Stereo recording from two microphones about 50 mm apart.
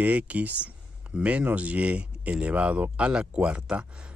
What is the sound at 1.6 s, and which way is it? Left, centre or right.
Speech, right.